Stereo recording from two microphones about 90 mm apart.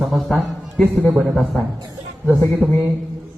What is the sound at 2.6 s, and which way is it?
Speech, 20° left (ahead or behind).